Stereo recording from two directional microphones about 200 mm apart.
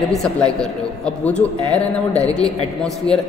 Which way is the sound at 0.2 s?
5° left (ahead or behind).